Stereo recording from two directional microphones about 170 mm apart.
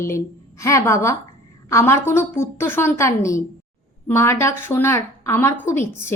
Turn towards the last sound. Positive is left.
turn(degrees=15)  # may be behind; listen again after turning